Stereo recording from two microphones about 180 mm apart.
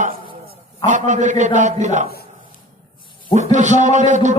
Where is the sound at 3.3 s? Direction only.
40° right (ahead or behind).